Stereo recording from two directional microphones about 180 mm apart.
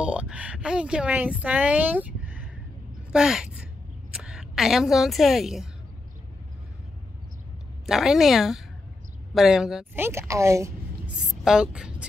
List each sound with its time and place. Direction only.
0.0 s speech: 5° right (ahead or behind)
7.8 s speech: centre (ahead or behind)
10.0 s speech: 15° right (ahead or behind)
11.1 s speech: 5° right (ahead or behind)